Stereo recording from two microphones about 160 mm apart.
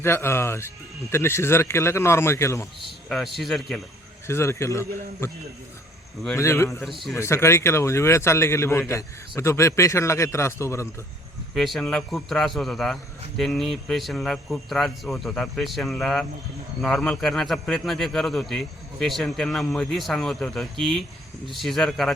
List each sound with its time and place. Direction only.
0.0 s speech: 15° left (ahead or behind)
3.1 s a man's voice: centre (ahead or behind)
4.3 s speech: 15° left (ahead or behind)
6.3 s speech: 15° left (ahead or behind)
11.5 s a man's voice: centre (ahead or behind)